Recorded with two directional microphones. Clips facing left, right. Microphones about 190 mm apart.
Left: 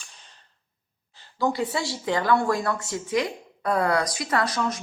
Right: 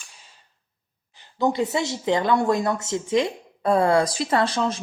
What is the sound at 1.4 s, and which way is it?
A woman's voice, 20° right (ahead or behind).